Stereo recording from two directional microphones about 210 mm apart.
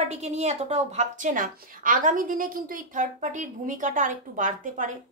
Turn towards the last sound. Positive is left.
turn(degrees=-40)  # may be behind; listen again after turning